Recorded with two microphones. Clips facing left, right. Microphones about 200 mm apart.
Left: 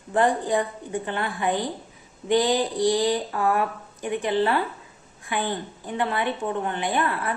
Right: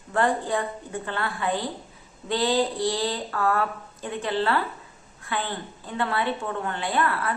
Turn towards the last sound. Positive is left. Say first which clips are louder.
# even
turn(degrees=20)  # may be behind; listen again after turning